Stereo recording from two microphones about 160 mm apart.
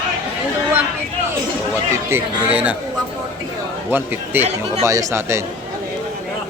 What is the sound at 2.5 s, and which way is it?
Speech, 10° right (ahead or behind).